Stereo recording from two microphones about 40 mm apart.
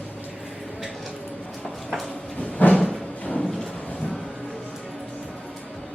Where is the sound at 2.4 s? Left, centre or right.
Left.